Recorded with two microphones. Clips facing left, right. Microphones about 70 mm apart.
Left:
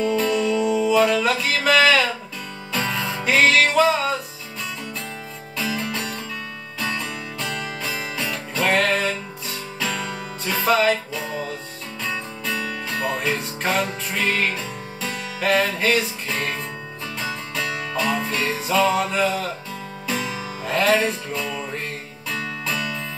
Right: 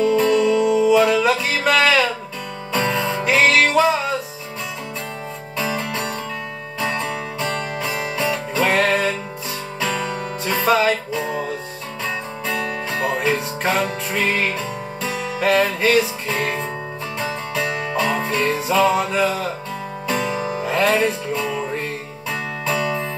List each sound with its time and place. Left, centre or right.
0.0 s music: centre
5.8 s music: centre
12.4 s music: centre
20.3 s music: right
20.6 s music: centre